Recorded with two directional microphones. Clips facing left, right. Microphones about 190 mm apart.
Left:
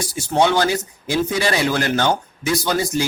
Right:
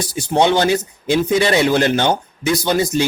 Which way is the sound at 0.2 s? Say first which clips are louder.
Right 2 dB; 20° right (ahead or behind).